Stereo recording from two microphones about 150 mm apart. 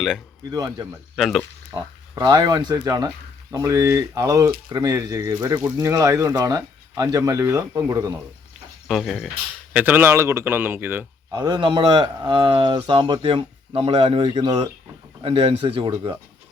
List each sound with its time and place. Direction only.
0.5 s speech: 25° right (ahead or behind)
1.1 s speech: centre (ahead or behind)
1.7 s speech: 30° right (ahead or behind)
8.9 s speech: centre (ahead or behind)
9.7 s speech: 10° right (ahead or behind)
11.3 s speech: 25° right (ahead or behind)
15.2 s speech: 35° right (ahead or behind)